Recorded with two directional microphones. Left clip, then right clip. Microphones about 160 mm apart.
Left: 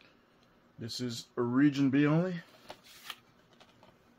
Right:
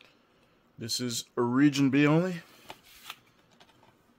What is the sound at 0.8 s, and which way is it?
Speech, 70° right (ahead or behind).